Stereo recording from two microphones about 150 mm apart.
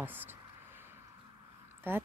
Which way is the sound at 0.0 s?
15° right (ahead or behind).